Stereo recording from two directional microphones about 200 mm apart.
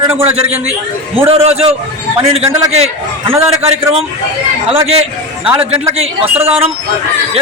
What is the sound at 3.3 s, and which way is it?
Speech, 30° right (ahead or behind).